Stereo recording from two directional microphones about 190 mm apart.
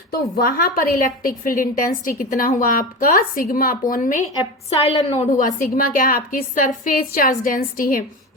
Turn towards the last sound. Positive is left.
turn(degrees=45)  # may be behind; listen again after turning